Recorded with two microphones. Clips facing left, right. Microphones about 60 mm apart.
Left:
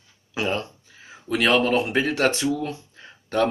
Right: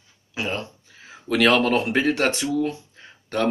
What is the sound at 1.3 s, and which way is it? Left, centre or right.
Speech, right.